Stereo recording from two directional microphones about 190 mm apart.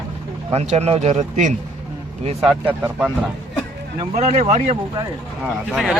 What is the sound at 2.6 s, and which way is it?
Speech, 10° right (ahead or behind).